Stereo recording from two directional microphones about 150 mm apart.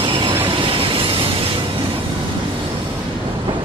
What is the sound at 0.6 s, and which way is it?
Train, 35° right (ahead or behind).